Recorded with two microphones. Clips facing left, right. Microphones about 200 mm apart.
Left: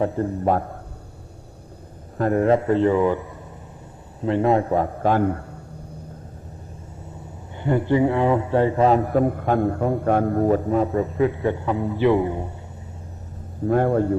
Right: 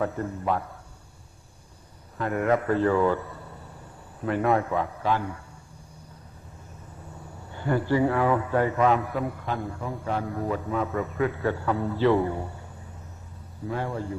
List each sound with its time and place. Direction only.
0.0 s speech: 30° left (ahead or behind)
0.4 s a man's voice: 45° left (ahead or behind)
2.1 s a man's voice: 40° left (ahead or behind)
4.7 s a man's voice: 45° left (ahead or behind)
7.5 s speech: 20° left (ahead or behind)
11.1 s a man's voice: 20° left (ahead or behind)
13.7 s speech: 55° left (ahead or behind)